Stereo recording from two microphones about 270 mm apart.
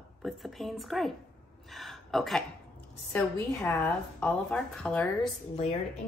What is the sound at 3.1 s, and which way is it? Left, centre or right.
A woman's voice, centre.